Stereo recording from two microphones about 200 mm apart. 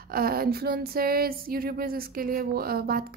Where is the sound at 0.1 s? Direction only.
50° right (ahead or behind).